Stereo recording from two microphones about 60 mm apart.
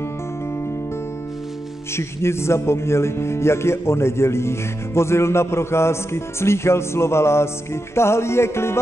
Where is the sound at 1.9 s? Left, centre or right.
Left.